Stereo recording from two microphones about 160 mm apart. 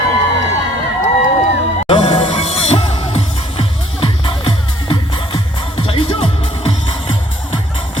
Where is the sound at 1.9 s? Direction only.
35° left (ahead or behind).